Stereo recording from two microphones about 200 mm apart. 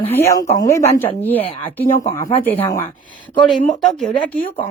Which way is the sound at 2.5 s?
15° left (ahead or behind).